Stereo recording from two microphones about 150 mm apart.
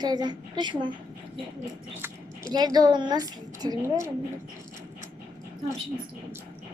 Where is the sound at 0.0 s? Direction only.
30° right (ahead or behind).